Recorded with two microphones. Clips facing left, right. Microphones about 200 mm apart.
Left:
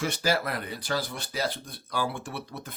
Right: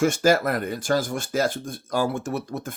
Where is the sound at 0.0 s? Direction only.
45° right (ahead or behind).